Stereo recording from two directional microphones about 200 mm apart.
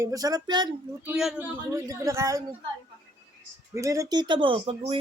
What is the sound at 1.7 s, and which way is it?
Speech, 15° right (ahead or behind).